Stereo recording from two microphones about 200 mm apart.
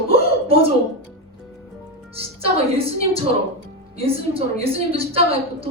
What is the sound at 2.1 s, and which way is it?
A woman's voice, 30° right (ahead or behind).